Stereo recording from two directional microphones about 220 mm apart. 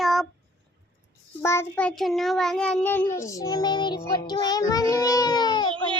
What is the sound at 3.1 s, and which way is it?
A child's voice, 15° left (ahead or behind).